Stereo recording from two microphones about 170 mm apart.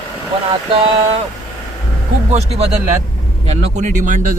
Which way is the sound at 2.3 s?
40° right (ahead or behind).